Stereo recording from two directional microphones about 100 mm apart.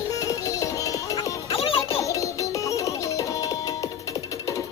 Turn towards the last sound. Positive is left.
turn(degrees=35)  # may be behind; listen again after turning